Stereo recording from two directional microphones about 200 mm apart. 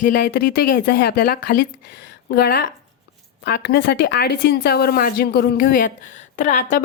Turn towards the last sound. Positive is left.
turn(degrees=35)  # may be behind; listen again after turning